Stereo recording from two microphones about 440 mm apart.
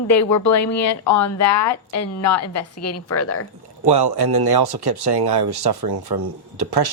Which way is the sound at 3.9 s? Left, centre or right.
Right.